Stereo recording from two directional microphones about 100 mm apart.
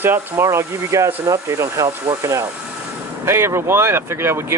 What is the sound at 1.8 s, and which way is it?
Speech, 45° right (ahead or behind).